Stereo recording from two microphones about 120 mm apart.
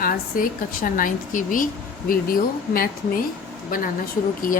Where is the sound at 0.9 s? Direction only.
90° left.